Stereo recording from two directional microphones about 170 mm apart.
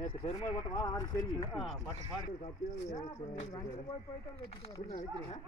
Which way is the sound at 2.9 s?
25° left (ahead or behind).